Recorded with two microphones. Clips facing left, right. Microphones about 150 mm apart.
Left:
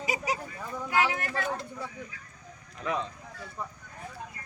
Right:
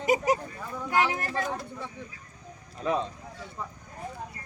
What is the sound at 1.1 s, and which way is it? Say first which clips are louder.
Speech: right 1 dB; 35° right (ahead or behind).